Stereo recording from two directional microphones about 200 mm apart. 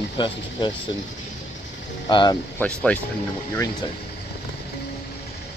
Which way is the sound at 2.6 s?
5° left (ahead or behind).